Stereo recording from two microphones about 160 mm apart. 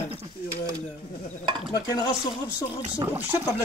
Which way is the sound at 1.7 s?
25° left (ahead or behind).